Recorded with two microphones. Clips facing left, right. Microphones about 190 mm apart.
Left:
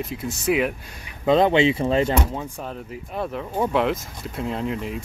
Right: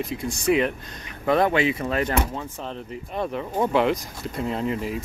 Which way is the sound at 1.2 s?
20° left (ahead or behind).